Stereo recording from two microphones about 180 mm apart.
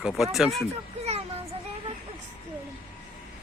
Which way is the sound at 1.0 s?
35° right (ahead or behind).